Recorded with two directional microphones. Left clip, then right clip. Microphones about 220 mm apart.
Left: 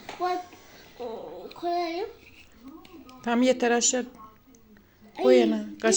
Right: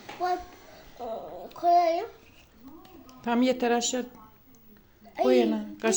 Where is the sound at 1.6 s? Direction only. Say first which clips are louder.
Right 7 dB; 35° right (ahead or behind).